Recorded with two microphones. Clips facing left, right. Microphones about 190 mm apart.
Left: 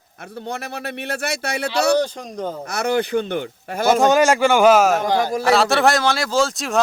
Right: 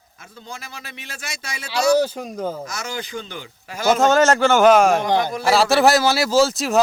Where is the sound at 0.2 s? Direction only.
65° left (ahead or behind).